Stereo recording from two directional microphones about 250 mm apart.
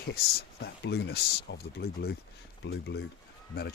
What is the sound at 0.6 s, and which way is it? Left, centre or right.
Speech, left.